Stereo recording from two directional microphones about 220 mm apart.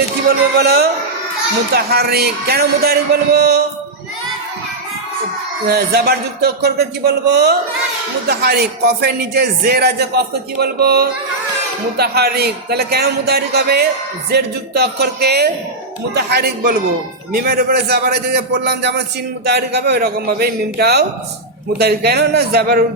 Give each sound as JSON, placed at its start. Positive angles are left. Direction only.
{"t": 0.3, "sound": "speech", "side_deg": -45}
{"t": 5.6, "sound": "speech", "side_deg": -45}